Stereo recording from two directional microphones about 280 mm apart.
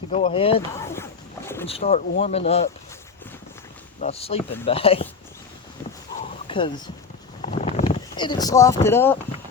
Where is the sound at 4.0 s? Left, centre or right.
Left.